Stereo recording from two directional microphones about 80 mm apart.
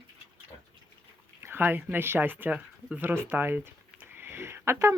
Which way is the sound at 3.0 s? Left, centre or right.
Right.